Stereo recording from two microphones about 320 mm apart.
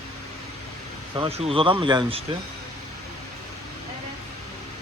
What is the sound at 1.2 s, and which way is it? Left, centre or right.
Speech, centre.